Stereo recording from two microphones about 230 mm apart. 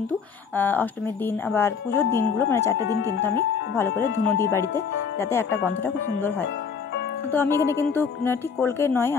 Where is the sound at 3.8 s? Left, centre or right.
Centre.